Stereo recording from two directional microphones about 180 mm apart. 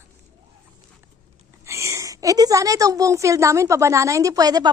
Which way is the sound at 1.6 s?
15° right (ahead or behind).